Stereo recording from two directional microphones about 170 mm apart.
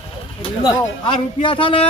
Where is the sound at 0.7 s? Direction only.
30° left (ahead or behind).